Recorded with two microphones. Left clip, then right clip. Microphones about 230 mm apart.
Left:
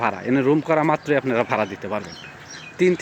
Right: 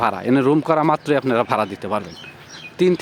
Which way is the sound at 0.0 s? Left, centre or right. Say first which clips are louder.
Right 3 dB; right.